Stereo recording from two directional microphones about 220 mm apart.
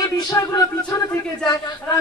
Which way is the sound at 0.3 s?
15° left (ahead or behind).